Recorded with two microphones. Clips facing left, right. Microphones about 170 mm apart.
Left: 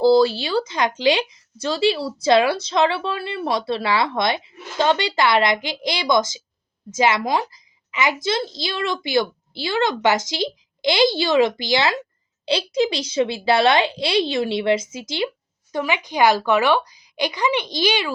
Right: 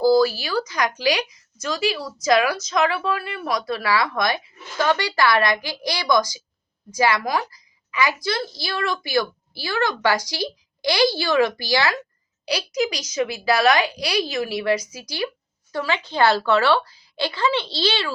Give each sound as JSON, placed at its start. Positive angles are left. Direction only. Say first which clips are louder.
{"t": 0.0, "sound": "a woman's voice", "louder": "left 2 dB", "side_deg": 25}